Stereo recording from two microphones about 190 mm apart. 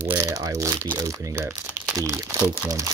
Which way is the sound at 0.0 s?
15° right (ahead or behind).